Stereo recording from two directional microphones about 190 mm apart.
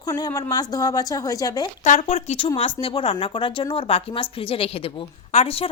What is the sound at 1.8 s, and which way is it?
A woman's voice, 35° left (ahead or behind).